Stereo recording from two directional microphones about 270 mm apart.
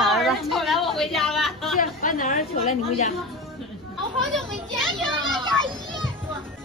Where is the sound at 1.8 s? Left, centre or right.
Left.